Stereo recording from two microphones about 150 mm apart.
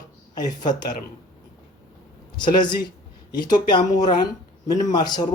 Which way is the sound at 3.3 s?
30° left (ahead or behind).